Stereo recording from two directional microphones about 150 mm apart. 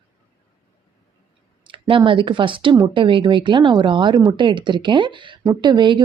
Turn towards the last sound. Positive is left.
turn(degrees=-30)  # may be behind; listen again after turning